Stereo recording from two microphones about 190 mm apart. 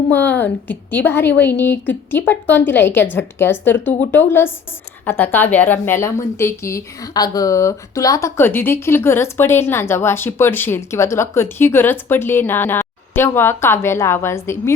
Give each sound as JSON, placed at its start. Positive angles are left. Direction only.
{"t": 0.1, "sound": "a woman's voice", "side_deg": 10}